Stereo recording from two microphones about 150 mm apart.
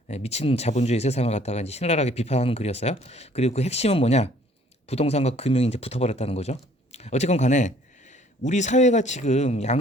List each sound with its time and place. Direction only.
0.1 s speech: 45° left (ahead or behind)